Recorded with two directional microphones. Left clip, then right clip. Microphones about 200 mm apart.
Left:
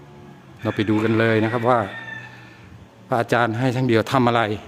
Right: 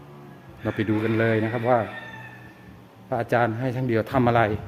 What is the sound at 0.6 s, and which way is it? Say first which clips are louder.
Speech: left 4 dB; 20° left (ahead or behind).